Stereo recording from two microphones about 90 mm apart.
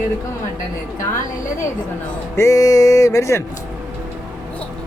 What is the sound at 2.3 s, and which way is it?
Music, 35° left (ahead or behind).